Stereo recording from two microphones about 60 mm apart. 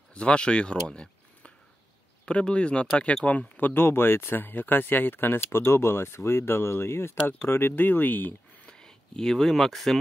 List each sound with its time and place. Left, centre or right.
0.1 s speech: centre
8.6 s speech: centre